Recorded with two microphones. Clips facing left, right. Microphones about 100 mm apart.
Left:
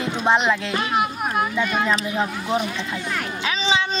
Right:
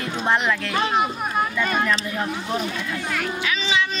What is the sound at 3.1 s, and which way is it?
Music, 30° left (ahead or behind).